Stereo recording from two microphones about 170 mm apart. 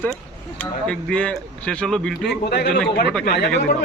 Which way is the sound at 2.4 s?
70° left (ahead or behind).